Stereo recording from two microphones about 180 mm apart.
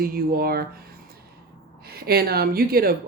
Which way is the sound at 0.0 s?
55° right (ahead or behind).